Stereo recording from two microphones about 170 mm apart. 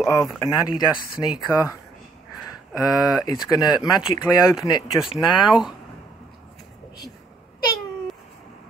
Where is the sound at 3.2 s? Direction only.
20° left (ahead or behind).